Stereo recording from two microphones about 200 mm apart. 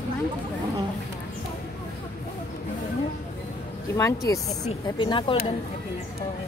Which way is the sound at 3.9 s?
15° left (ahead or behind).